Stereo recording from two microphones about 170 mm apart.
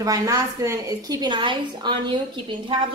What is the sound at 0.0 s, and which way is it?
A woman's voice, 20° right (ahead or behind).